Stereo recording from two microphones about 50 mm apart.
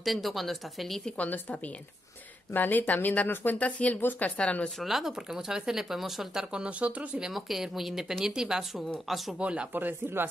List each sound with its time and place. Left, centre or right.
0.0 s speech: centre
1.1 s speech: left
4.8 s speech: centre
6.5 s speech: right
7.2 s speech: centre
9.0 s speech: centre
9.4 s speech: right
9.8 s speech: right